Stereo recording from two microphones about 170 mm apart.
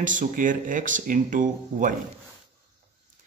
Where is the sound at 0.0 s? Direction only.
50° right (ahead or behind).